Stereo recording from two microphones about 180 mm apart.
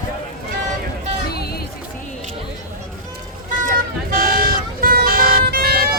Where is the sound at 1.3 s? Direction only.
60° left (ahead or behind).